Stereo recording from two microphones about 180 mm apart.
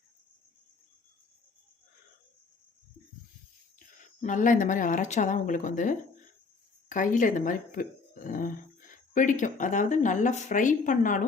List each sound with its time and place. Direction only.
4.2 s speech: 45° left (ahead or behind)